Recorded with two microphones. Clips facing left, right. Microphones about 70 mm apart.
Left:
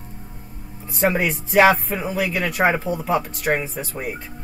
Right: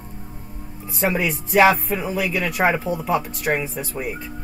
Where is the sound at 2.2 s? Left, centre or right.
Left.